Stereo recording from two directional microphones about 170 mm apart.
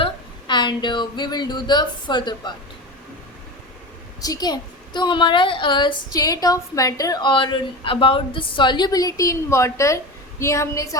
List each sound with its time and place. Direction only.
0.0 s speech: 25° left (ahead or behind)
4.2 s a woman's voice: 20° left (ahead or behind)